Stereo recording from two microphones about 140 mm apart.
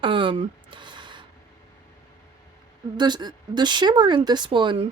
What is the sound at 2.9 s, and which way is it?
Speech, 30° right (ahead or behind).